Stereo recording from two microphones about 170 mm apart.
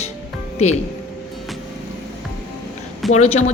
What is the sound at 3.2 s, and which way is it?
Speech, 40° left (ahead or behind).